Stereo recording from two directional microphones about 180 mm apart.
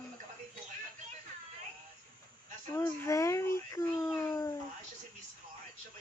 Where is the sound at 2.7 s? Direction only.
15° left (ahead or behind).